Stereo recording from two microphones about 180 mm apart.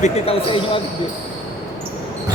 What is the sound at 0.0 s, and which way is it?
Speech, 35° left (ahead or behind).